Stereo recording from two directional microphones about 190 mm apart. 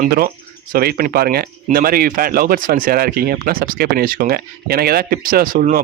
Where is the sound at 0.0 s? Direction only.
50° right (ahead or behind).